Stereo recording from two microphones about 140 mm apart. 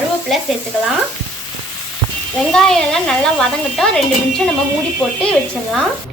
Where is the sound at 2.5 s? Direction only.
5° left (ahead or behind).